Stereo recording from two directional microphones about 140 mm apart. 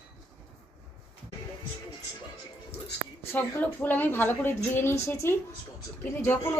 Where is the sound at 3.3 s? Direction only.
15° left (ahead or behind).